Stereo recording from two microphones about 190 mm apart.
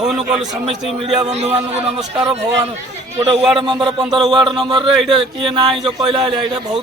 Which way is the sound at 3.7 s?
25° right (ahead or behind).